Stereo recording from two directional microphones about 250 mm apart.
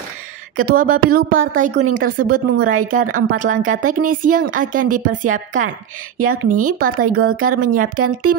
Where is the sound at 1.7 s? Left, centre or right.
Right.